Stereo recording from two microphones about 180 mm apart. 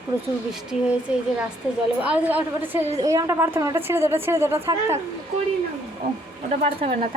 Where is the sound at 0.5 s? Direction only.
5° right (ahead or behind).